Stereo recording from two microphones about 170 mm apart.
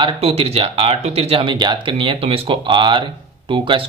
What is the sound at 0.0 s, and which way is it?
Speech, 35° right (ahead or behind).